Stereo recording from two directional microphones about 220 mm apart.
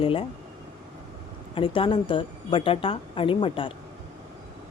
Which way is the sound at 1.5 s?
25° left (ahead or behind).